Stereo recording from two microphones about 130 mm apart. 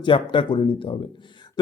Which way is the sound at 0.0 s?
40° left (ahead or behind).